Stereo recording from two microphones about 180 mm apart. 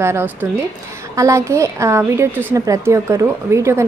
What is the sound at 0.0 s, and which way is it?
A woman's voice, 15° right (ahead or behind).